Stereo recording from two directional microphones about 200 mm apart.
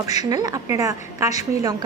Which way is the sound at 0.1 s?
20° right (ahead or behind).